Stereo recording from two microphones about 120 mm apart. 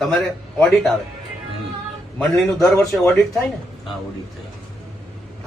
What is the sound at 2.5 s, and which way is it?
Speech, 25° left (ahead or behind).